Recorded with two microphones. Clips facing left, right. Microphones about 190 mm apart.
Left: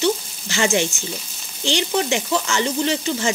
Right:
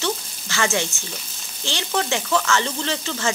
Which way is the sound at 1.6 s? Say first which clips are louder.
Left 4 dB; 15° left (ahead or behind).